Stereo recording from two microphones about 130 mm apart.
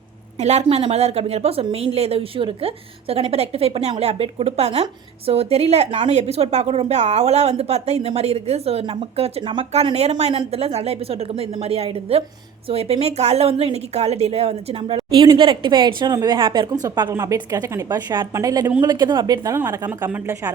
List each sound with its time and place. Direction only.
0.3 s a woman's voice: 60° right (ahead or behind); by 9.6 s 40° right (ahead or behind)
9.7 s a woman's voice: 55° right (ahead or behind); by 17.1 s 30° right (ahead or behind)
17.1 s a woman's voice: 20° right (ahead or behind)